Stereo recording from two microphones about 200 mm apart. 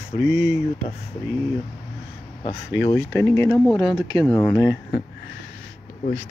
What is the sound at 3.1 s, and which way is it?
Speech, 10° left (ahead or behind).